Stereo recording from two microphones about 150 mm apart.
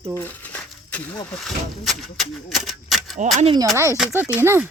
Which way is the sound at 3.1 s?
55° right (ahead or behind).